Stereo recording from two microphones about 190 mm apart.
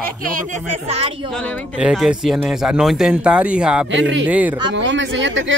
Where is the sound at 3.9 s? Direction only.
75° right (ahead or behind).